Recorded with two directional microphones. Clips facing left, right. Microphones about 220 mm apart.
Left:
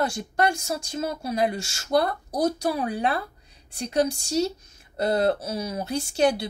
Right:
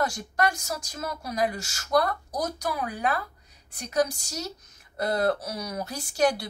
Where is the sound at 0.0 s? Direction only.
25° left (ahead or behind).